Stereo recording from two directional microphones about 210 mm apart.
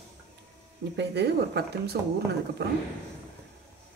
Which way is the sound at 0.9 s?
55° right (ahead or behind).